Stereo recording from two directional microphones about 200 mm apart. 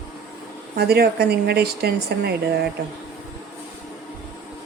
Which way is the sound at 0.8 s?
50° right (ahead or behind).